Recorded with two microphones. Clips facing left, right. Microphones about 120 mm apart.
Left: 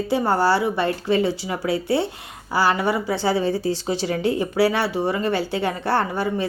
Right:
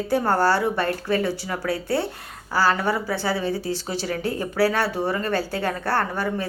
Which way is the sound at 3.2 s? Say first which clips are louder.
Left 4 dB; 30° left (ahead or behind).